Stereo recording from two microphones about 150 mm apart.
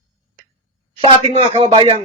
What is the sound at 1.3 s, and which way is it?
Speech, 45° right (ahead or behind).